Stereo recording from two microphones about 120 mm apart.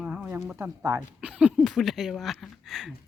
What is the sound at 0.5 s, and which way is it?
Speech, 25° right (ahead or behind).